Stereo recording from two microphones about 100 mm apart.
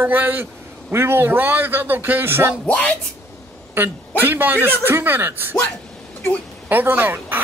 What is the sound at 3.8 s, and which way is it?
A man's voice, 20° right (ahead or behind).